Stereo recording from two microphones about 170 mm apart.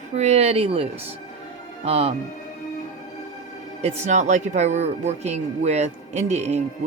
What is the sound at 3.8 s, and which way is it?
Speech, 40° right (ahead or behind).